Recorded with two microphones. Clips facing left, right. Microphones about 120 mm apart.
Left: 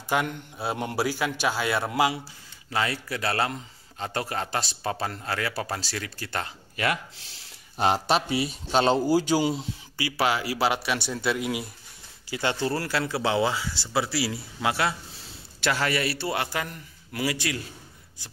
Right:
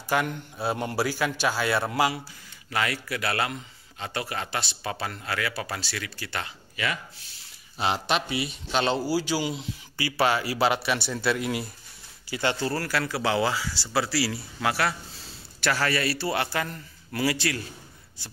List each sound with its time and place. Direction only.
0.1 s a man's voice: 20° left (ahead or behind); by 9.7 s 40° left (ahead or behind)
9.9 s a man's voice: 15° left (ahead or behind)
11.2 s speech: 5° left (ahead or behind)
12.3 s speech: 15° left (ahead or behind)